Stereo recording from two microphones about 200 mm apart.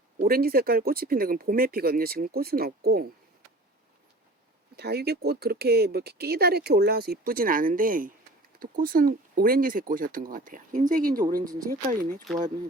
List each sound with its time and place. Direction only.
0.3 s speech: 50° right (ahead or behind)
4.8 s speech: 55° right (ahead or behind)
11.3 s speech: 20° right (ahead or behind)
11.7 s speech: 45° right (ahead or behind)